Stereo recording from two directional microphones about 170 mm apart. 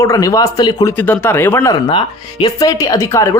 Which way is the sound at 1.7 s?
30° left (ahead or behind).